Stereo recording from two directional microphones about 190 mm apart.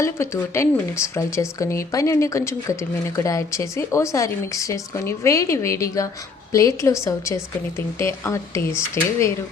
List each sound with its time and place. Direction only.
0.0 s speech: 15° left (ahead or behind)